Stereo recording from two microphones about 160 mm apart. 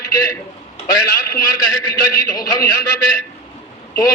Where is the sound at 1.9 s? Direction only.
20° left (ahead or behind).